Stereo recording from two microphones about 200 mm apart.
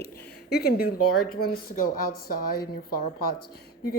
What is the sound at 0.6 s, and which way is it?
A woman's voice, 50° left (ahead or behind).